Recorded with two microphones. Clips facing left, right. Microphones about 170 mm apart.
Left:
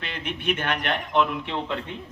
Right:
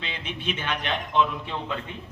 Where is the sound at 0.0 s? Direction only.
55° left (ahead or behind).